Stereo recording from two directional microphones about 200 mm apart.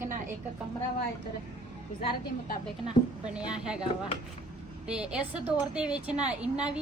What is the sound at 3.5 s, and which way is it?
Speech, 5° right (ahead or behind).